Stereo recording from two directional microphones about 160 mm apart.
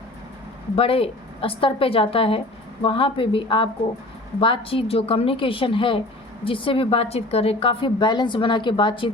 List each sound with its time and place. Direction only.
0.8 s a woman's voice: 35° left (ahead or behind)